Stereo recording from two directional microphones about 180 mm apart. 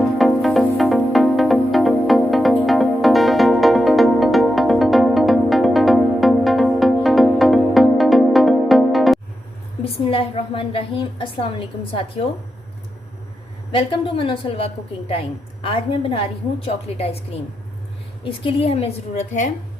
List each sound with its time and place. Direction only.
0.0 s music: centre (ahead or behind)
9.8 s a sound: 30° left (ahead or behind)
11.9 s a woman's voice: 30° left (ahead or behind)
13.7 s a woman's voice: 30° left (ahead or behind)